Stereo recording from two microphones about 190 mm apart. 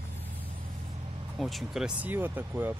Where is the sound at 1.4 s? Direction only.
Centre (ahead or behind).